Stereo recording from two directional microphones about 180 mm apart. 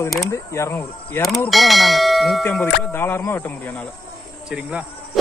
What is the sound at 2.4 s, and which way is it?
Speech, 10° left (ahead or behind).